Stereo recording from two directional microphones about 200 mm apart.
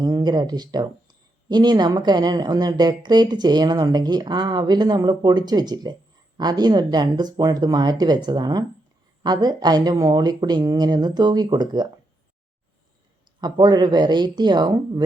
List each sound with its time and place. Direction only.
0.0 s speech: 20° right (ahead or behind)
13.4 s speech: 20° right (ahead or behind)